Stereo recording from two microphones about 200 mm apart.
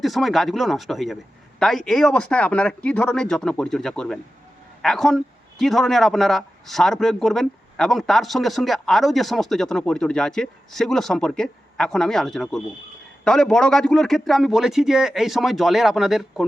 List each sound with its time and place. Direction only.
0.0 s speech: centre (ahead or behind)